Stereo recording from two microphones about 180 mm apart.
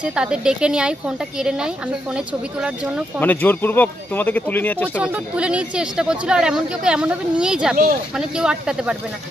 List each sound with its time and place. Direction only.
0.0 s speech: 5° right (ahead or behind)
3.2 s speech: 10° left (ahead or behind)
4.9 s speech: 5° right (ahead or behind)
7.7 s speech: 50° right (ahead or behind)
8.4 s speech: 5° right (ahead or behind)